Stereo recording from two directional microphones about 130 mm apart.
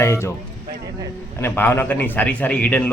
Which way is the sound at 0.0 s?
20° left (ahead or behind).